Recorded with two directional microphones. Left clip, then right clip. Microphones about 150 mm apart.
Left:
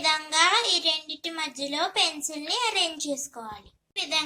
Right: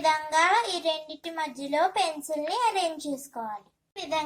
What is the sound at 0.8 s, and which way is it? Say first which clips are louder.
A child's voice: left 3 dB; 55° right (ahead or behind).